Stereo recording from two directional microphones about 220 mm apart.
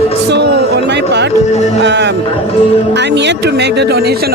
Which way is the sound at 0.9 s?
50° right (ahead or behind).